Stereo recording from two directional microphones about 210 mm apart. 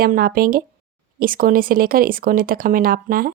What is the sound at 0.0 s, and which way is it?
Speech, 45° right (ahead or behind).